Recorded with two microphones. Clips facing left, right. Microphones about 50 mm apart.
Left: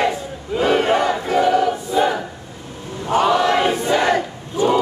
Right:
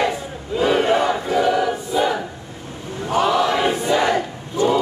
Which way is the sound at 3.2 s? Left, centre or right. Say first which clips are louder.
Left 1 dB; left.